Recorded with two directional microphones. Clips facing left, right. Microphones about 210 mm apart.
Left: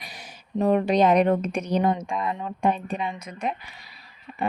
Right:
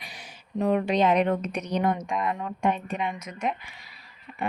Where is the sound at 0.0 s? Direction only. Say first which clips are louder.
Left 2 dB; 40° left (ahead or behind).